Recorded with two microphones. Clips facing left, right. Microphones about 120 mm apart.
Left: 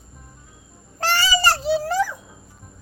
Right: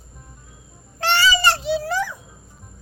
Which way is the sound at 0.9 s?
40° left (ahead or behind).